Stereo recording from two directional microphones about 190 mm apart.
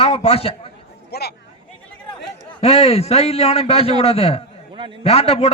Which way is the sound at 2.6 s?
30° left (ahead or behind).